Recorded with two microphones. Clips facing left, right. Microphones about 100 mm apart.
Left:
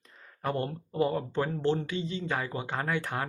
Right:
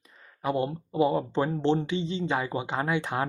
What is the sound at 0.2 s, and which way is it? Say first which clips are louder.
Speech: right 4 dB; 10° right (ahead or behind).